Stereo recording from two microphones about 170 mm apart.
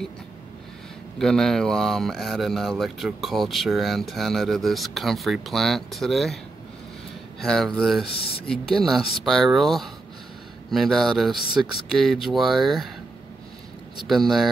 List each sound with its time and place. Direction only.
1.1 s speech: 5° left (ahead or behind)
8.1 s speech: 65° left (ahead or behind)
8.5 s speech: centre (ahead or behind)
14.0 s speech: centre (ahead or behind)